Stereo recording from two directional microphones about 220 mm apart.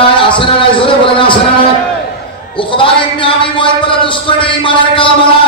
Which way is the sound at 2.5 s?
25° left (ahead or behind).